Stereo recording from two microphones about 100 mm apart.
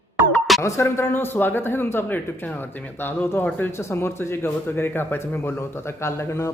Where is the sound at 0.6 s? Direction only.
30° left (ahead or behind).